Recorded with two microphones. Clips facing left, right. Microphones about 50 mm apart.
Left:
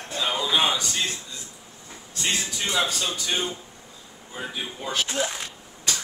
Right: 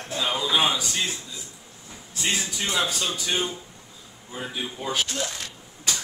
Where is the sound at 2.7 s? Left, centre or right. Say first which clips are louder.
Left 1 dB; centre.